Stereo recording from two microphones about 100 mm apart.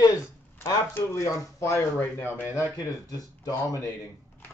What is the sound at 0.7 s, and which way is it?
Speech, 35° left (ahead or behind).